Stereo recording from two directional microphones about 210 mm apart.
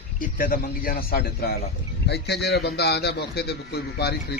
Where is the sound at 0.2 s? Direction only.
40° left (ahead or behind).